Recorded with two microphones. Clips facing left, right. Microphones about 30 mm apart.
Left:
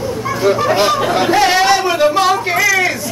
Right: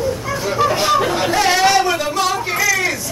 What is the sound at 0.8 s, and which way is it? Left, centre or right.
Speech, centre.